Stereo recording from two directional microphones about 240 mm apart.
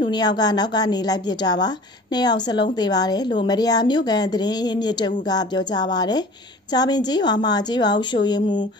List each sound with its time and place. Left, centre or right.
0.0 s a woman's voice: centre